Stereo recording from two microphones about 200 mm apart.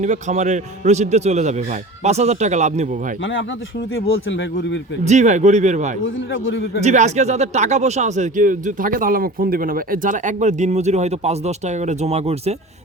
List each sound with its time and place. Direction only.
0.0 s speech: 35° right (ahead or behind)
3.2 s speech: 70° left (ahead or behind)
5.0 s speech: 35° right (ahead or behind)
6.0 s speech: 75° left (ahead or behind)
6.8 s speech: 35° right (ahead or behind)